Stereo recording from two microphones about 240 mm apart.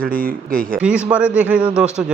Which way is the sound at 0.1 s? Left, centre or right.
Right.